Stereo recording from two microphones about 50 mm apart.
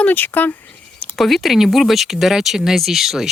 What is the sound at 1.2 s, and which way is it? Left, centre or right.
Speech, centre.